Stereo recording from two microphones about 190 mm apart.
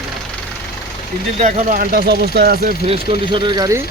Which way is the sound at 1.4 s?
45° right (ahead or behind).